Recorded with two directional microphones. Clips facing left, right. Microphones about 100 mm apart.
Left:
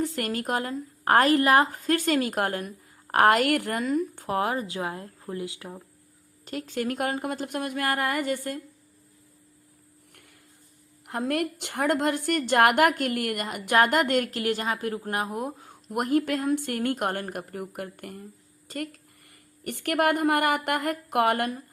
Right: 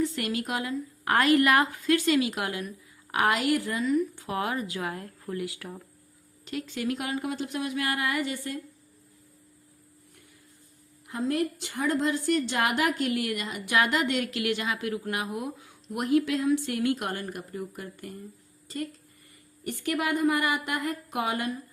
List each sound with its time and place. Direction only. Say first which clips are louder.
0.0 s a woman's voice: even; 45° left (ahead or behind); by 5.8 s 20° left (ahead or behind)
6.4 s a woman's voice: left 2 dB; 40° left (ahead or behind)
10.1 s a sound: left 2 dB; 65° left (ahead or behind)
11.0 s a woman's voice: left 1 dB; 65° left (ahead or behind)